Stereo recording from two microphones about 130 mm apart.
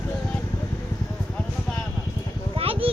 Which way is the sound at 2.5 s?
45° right (ahead or behind).